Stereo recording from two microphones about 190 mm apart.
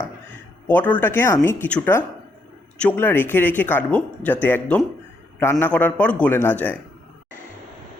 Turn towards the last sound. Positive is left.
turn(degrees=10)  # may be behind; listen again after turning